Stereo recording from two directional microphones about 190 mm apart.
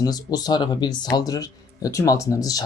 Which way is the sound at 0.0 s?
20° left (ahead or behind).